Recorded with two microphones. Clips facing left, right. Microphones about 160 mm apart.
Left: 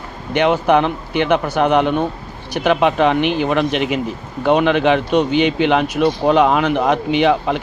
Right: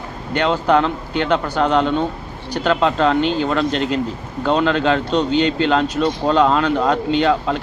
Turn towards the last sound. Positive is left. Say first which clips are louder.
# left 2 dB
turn(degrees=15)  # may be behind; listen again after turning